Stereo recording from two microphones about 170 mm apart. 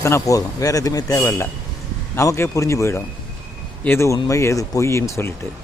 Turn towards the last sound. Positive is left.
turn(degrees=15)  # may be behind; listen again after turning